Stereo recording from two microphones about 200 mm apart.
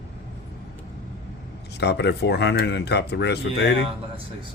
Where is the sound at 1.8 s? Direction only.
60° left (ahead or behind).